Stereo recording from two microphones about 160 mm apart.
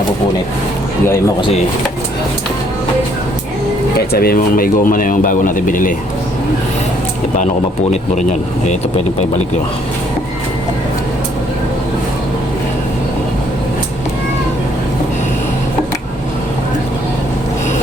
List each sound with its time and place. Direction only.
4.1 s speech: 70° left (ahead or behind)
7.3 s speech: 50° left (ahead or behind)